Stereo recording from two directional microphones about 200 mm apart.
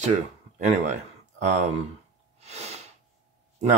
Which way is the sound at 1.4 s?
35° right (ahead or behind).